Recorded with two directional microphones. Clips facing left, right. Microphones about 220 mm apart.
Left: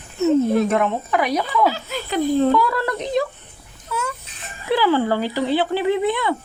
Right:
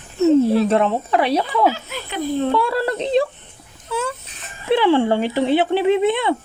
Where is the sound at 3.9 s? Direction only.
30° right (ahead or behind).